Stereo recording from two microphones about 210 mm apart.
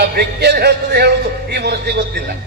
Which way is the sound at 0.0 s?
50° right (ahead or behind).